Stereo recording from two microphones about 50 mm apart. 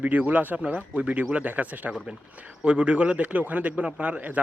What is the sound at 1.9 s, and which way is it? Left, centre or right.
A man's voice, centre.